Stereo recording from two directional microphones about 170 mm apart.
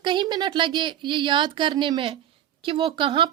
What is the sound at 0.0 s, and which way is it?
A woman's voice, 25° right (ahead or behind).